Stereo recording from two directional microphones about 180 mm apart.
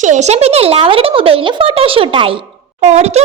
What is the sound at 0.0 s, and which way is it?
A child's voice, 40° right (ahead or behind).